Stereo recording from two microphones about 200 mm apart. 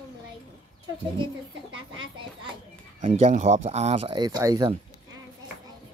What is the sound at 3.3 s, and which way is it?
Speech, 40° right (ahead or behind).